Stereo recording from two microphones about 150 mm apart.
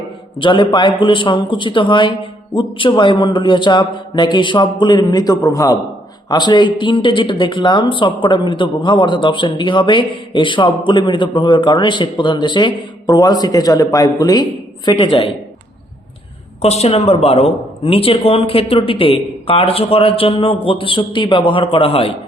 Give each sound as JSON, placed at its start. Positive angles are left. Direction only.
{"t": 0.3, "sound": "speech", "side_deg": 35}
{"t": 16.6, "sound": "speech", "side_deg": 45}